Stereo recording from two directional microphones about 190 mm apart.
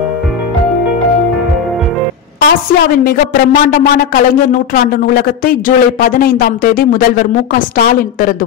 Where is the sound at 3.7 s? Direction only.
50° left (ahead or behind).